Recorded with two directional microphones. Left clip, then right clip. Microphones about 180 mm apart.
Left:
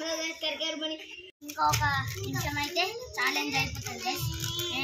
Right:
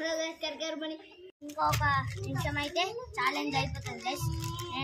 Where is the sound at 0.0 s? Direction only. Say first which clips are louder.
Left 1 dB; 30° left (ahead or behind).